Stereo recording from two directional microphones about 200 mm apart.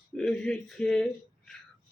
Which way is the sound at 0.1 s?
5° left (ahead or behind).